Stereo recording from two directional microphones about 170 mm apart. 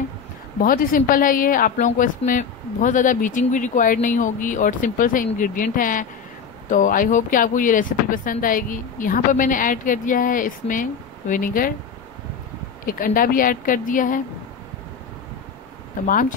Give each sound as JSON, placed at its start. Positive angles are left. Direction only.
{"t": 0.6, "sound": "a woman's voice", "side_deg": 55}
{"t": 12.8, "sound": "a woman's voice", "side_deg": 55}
{"t": 16.1, "sound": "a woman's voice", "side_deg": 50}